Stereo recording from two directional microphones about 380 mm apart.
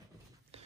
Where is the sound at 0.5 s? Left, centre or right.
Centre.